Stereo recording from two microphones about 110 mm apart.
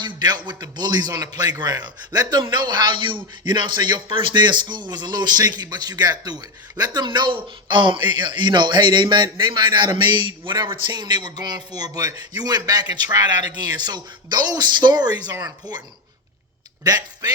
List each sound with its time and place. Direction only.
0.0 s speech: 40° right (ahead or behind)
16.8 s speech: 35° right (ahead or behind)